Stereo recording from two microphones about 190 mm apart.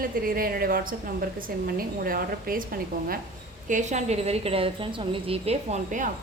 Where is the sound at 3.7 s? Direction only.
40° right (ahead or behind).